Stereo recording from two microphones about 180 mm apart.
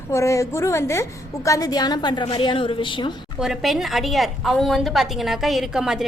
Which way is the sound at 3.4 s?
5° right (ahead or behind).